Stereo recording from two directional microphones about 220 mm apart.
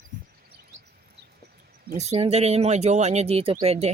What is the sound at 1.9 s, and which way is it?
Speech, 30° right (ahead or behind).